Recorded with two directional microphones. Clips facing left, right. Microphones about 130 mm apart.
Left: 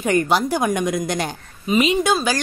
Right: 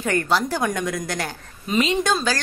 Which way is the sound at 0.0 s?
15° left (ahead or behind).